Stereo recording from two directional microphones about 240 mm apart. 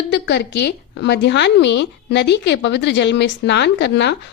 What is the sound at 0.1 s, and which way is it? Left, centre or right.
A woman's voice, left.